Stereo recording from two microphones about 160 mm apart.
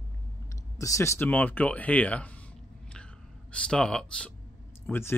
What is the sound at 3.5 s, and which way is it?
Speech, 5° left (ahead or behind).